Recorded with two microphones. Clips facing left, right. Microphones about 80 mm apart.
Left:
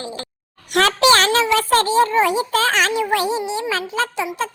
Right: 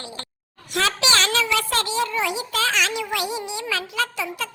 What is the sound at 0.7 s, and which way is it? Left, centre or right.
A child's voice, left.